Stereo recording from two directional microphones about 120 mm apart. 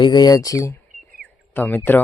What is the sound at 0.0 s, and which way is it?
Speech, 35° left (ahead or behind).